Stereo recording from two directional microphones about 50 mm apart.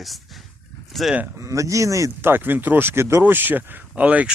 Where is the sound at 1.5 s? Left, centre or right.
Right.